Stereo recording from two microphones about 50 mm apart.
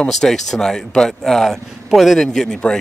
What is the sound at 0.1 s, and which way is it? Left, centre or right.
A man's voice, centre.